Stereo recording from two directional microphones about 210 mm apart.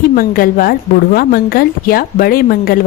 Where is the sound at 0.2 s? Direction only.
45° left (ahead or behind).